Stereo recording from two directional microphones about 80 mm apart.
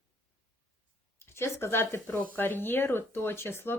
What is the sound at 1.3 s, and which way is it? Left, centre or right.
A woman's voice, left.